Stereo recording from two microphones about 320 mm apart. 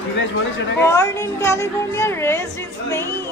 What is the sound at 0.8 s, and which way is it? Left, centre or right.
A woman's voice, centre.